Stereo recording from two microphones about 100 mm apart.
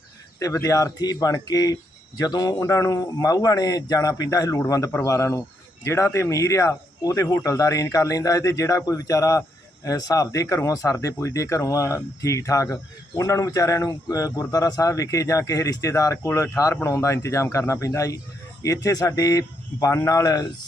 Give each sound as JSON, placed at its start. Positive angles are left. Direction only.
{"t": 0.3, "sound": "a man's voice", "side_deg": 35}